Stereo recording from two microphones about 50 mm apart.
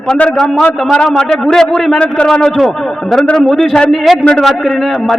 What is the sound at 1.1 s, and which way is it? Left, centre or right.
Speech, centre.